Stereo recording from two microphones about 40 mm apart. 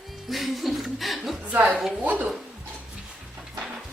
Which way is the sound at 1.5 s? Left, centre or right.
Right.